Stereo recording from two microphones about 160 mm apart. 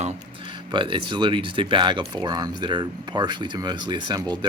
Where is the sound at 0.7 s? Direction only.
30° right (ahead or behind).